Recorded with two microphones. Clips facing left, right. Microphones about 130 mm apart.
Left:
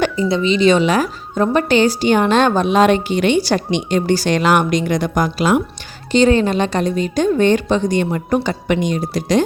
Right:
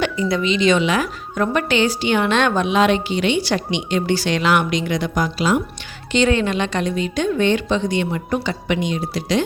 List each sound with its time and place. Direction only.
0.2 s speech: 30° left (ahead or behind); by 5.6 s 50° left (ahead or behind)
6.1 s a woman's voice: 35° left (ahead or behind)